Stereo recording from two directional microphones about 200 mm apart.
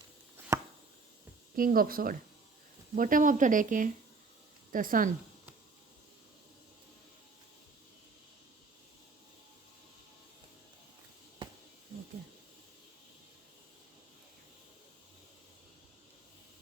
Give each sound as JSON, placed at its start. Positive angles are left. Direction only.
{"t": 1.5, "sound": "speech", "side_deg": -45}